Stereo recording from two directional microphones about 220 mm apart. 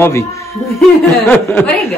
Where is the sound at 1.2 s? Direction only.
10° left (ahead or behind).